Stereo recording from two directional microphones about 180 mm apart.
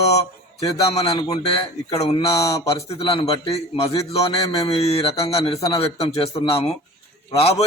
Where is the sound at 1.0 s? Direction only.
20° left (ahead or behind).